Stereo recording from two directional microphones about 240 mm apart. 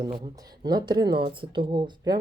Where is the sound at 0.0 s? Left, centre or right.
Centre.